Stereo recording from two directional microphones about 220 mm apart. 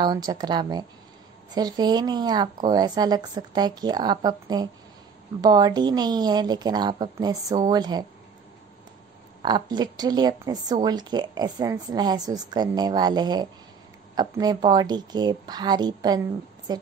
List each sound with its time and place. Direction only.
0.0 s a woman's voice: 20° right (ahead or behind)
9.4 s a woman's voice: 20° right (ahead or behind)